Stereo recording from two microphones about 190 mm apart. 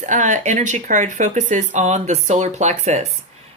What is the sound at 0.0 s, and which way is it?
Speech, 40° right (ahead or behind).